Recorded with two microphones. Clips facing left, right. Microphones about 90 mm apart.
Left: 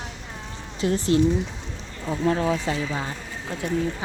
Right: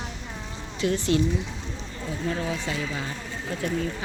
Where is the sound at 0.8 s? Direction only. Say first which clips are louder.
Left 3 dB; 35° left (ahead or behind).